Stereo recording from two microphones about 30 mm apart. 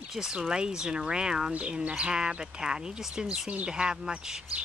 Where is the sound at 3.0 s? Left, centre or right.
Centre.